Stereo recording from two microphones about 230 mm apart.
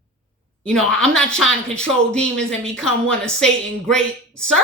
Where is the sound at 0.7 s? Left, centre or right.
Centre.